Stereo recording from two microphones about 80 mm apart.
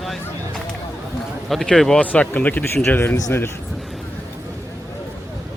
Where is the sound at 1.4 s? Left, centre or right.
Centre; by 3.2 s left.